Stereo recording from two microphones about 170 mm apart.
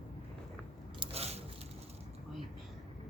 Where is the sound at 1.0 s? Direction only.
35° right (ahead or behind).